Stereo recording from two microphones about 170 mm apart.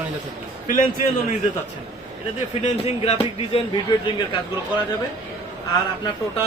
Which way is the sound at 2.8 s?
35° left (ahead or behind).